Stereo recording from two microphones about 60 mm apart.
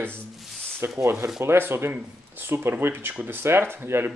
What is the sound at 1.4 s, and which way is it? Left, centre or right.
Speech, right.